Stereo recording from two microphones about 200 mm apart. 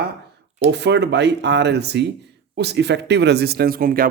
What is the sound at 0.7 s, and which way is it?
Speech, 60° right (ahead or behind).